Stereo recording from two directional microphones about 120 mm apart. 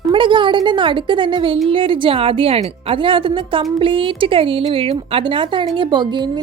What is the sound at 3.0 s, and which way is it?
A woman's voice, 45° right (ahead or behind).